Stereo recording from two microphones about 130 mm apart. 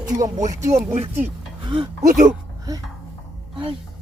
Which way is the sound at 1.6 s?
35° right (ahead or behind).